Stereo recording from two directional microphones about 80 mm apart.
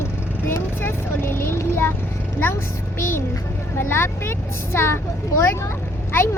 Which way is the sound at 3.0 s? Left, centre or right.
Left.